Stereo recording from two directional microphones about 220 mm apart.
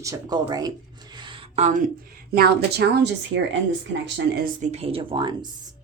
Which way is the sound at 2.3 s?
45° right (ahead or behind).